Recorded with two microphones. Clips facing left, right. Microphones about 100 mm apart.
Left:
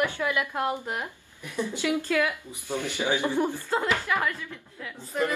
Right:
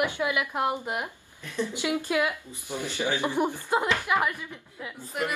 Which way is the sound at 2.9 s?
15° left (ahead or behind).